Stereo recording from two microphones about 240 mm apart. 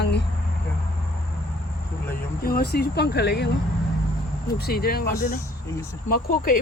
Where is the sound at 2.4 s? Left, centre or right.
Left.